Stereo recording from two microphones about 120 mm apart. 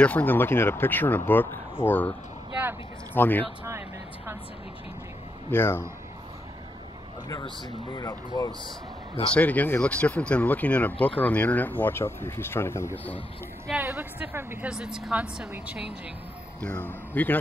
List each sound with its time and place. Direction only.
0.0 s speech: 15° left (ahead or behind)
3.2 s speech: 15° left (ahead or behind)
5.5 s speech: 20° left (ahead or behind)
7.2 s speech: 35° left (ahead or behind)
9.3 s speech: 15° left (ahead or behind)
13.7 s speech: 15° right (ahead or behind)
14.7 s speech: 5° right (ahead or behind)
16.6 s speech: 15° left (ahead or behind)